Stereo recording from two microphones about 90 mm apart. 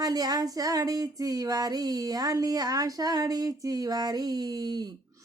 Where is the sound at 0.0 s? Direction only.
45° right (ahead or behind).